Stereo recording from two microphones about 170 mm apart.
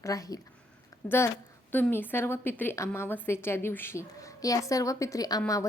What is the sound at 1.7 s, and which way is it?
A woman's voice, 10° left (ahead or behind).